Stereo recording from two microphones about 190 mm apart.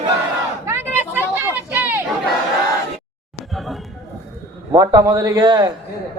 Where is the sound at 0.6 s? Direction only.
10° right (ahead or behind).